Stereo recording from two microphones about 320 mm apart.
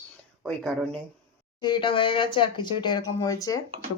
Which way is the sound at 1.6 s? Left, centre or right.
Centre.